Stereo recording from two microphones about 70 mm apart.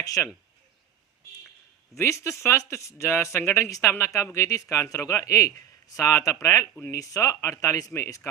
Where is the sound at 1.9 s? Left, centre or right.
Left.